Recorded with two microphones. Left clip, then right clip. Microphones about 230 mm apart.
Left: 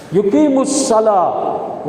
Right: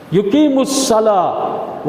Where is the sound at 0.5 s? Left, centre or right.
Right.